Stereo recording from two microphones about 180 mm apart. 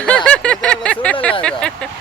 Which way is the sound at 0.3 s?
5° left (ahead or behind).